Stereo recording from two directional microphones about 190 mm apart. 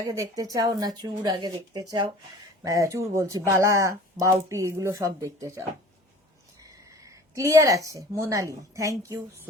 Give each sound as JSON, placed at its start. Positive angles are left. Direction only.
{"t": 0.1, "sound": "speech", "side_deg": -15}
{"t": 7.3, "sound": "speech", "side_deg": -15}